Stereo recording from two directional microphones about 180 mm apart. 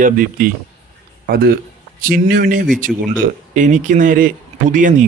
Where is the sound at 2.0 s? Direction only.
55° right (ahead or behind).